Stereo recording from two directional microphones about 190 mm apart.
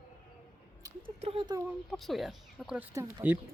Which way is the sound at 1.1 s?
30° right (ahead or behind).